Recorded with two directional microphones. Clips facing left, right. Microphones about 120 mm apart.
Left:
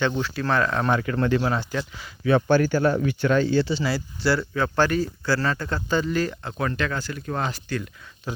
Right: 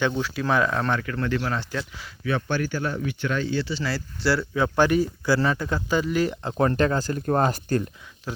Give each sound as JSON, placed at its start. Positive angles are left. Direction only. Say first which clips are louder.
{"t": 0.0, "sound": "speech", "louder": "even", "side_deg": -5}
{"t": 0.8, "sound": "speech", "louder": "left 2 dB", "side_deg": 15}
{"t": 1.0, "sound": "speech", "louder": "left 4 dB", "side_deg": 25}
{"t": 1.7, "sound": "speech", "louder": "left 2 dB", "side_deg": 0}
{"t": 2.2, "sound": "speech", "louder": "left 7 dB", "side_deg": 40}
{"t": 4.2, "sound": "speech", "louder": "even", "side_deg": 0}
{"t": 4.8, "sound": "speech", "louder": "right 2 dB", "side_deg": -15}
{"t": 6.6, "sound": "speech", "louder": "right 5 dB", "side_deg": -35}